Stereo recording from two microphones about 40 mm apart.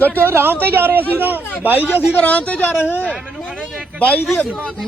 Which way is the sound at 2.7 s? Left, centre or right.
Left.